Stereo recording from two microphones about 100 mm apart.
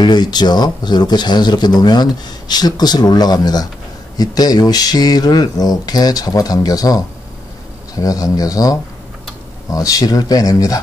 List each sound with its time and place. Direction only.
0.0 s speech: 45° left (ahead or behind)